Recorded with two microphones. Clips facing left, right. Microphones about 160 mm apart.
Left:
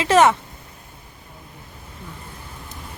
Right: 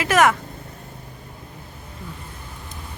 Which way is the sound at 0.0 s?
25° left (ahead or behind).